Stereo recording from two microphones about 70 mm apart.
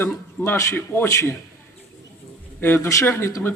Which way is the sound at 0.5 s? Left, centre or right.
Left.